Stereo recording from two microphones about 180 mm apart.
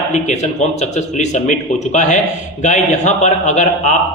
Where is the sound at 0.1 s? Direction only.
40° left (ahead or behind).